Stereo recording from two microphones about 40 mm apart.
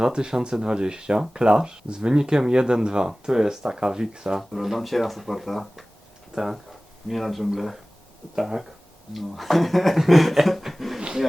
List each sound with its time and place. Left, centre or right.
0.0 s speech: centre
4.4 s speech: centre
9.1 s speech: centre